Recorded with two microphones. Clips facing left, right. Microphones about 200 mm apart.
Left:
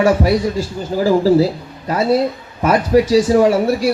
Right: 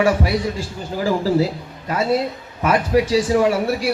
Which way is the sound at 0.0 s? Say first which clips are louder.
Left 4 dB; 40° left (ahead or behind).